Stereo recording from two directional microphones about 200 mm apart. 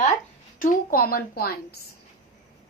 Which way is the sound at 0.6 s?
45° left (ahead or behind).